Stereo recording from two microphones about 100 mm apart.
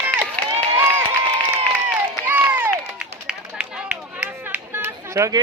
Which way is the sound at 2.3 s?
20° right (ahead or behind).